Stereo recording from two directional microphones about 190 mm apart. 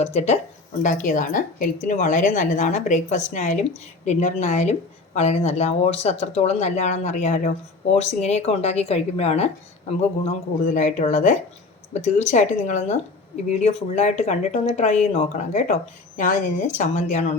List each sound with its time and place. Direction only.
0.0 s speech: 35° left (ahead or behind)